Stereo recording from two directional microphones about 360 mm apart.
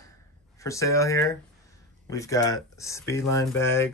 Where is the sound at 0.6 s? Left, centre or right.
Centre.